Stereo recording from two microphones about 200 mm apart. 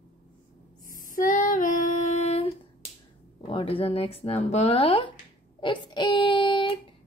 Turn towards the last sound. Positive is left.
turn(degrees=25)  # may be behind; listen again after turning